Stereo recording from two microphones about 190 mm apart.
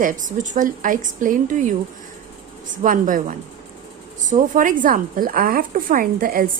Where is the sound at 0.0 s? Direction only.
45° right (ahead or behind).